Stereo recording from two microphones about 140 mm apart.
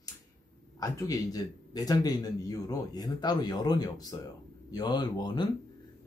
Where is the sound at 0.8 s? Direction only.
25° left (ahead or behind).